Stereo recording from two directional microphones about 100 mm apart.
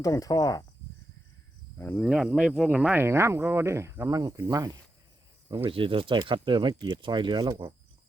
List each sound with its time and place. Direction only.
0.0 s cricket: 35° left (ahead or behind)
2.0 s speech: 5° right (ahead or behind)
2.9 s speech: 25° right (ahead or behind)
4.2 s speech: 45° right (ahead or behind)
5.6 s speech: 60° right (ahead or behind); by 7.5 s 45° right (ahead or behind)